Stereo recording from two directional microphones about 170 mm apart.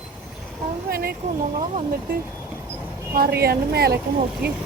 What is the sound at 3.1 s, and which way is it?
Speech, 65° right (ahead or behind).